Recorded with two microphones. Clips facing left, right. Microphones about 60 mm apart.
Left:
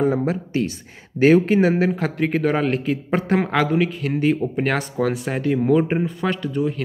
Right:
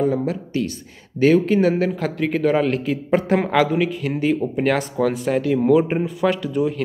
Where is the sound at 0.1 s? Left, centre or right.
Left.